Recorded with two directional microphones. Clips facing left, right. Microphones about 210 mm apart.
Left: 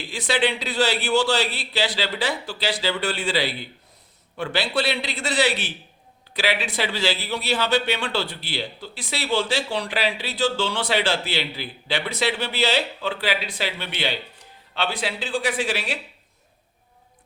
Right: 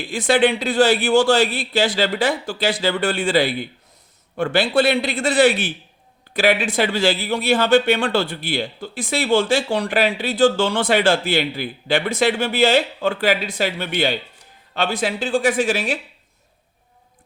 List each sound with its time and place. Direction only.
0.1 s speech: 50° right (ahead or behind)